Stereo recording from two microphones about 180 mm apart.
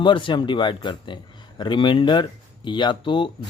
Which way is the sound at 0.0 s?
25° left (ahead or behind).